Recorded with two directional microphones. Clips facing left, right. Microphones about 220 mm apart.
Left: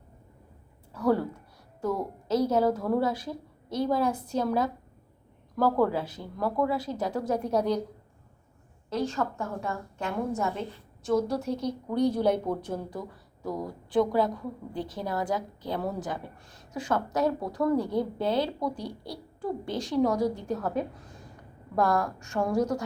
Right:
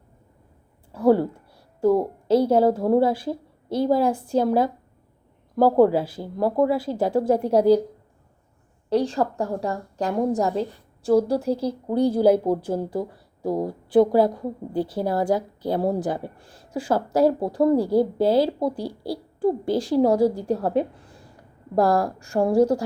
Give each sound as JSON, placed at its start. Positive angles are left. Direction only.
{"t": 0.9, "sound": "a woman's voice", "side_deg": -30}
{"t": 8.9, "sound": "a woman's voice", "side_deg": -35}